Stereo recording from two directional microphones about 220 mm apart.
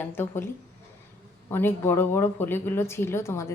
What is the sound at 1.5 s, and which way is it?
A woman's voice, 10° left (ahead or behind).